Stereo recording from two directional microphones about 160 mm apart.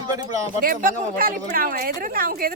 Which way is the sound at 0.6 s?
60° right (ahead or behind).